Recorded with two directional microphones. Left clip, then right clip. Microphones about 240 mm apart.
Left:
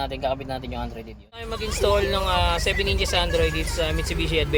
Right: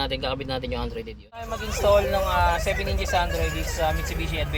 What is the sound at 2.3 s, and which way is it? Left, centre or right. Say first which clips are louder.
Speech: even; centre.